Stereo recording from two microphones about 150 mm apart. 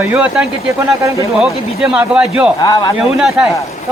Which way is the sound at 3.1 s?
5° right (ahead or behind).